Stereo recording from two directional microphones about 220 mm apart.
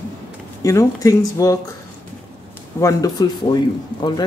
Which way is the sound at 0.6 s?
15° left (ahead or behind).